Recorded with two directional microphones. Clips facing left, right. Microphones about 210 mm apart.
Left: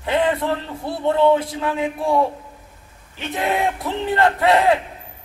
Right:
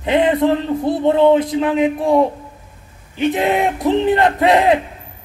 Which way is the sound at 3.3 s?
20° right (ahead or behind).